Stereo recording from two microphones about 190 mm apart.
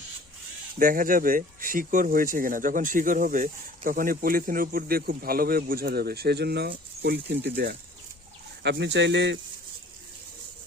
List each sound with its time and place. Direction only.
0.8 s speech: 45° right (ahead or behind); by 9.4 s 65° right (ahead or behind)